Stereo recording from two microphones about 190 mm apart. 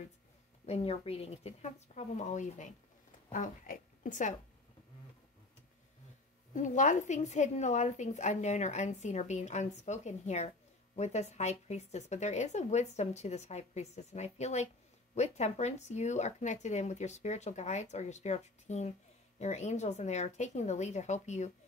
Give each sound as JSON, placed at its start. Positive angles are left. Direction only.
{"t": 0.7, "sound": "a woman's voice", "side_deg": 35}
{"t": 6.5, "sound": "speech", "side_deg": 40}